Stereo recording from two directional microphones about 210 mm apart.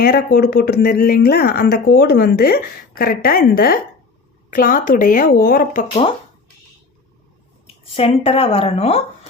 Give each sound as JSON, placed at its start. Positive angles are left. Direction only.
{"t": 0.0, "sound": "speech", "side_deg": 50}
{"t": 7.9, "sound": "a woman's voice", "side_deg": 25}